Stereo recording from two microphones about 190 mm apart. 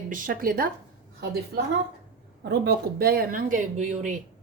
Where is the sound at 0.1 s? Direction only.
45° right (ahead or behind).